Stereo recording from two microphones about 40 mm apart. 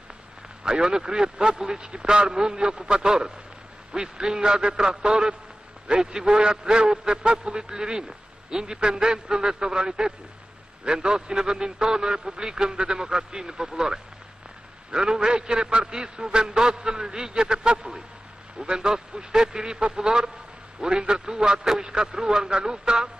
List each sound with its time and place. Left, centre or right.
0.7 s a man's voice: centre